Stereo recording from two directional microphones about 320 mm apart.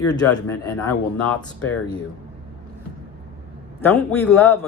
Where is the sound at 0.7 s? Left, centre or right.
Left.